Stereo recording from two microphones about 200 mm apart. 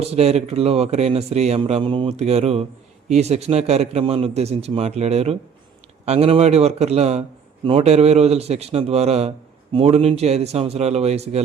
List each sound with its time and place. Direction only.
0.0 s speech: 30° right (ahead or behind)